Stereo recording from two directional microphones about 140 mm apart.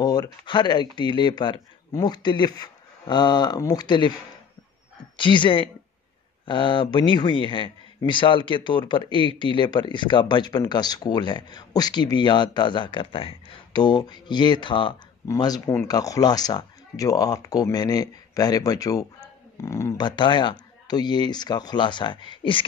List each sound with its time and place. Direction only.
0.0 s speech: 30° left (ahead or behind)
5.1 s speech: 35° left (ahead or behind)
20.0 s speech: 35° left (ahead or behind)